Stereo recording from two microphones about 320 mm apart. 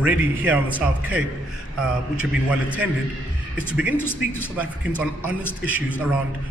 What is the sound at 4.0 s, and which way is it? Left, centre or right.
A man's voice, centre.